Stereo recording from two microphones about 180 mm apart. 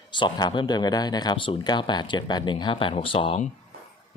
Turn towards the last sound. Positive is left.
turn(degrees=30)  # may be behind; listen again after turning